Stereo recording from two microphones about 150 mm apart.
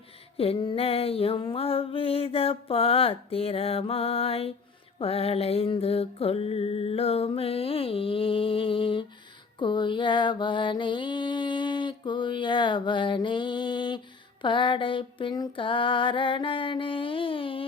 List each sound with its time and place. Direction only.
0.3 s mantra: 35° left (ahead or behind)